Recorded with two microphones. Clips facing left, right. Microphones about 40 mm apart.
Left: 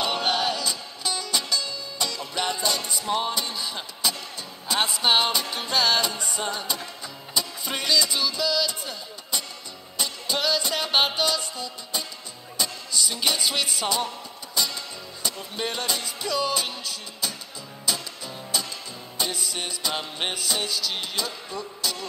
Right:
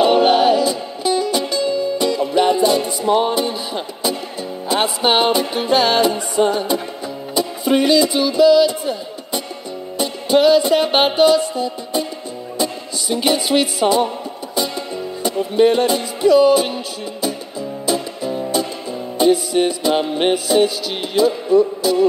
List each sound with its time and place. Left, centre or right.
0.0 s music: centre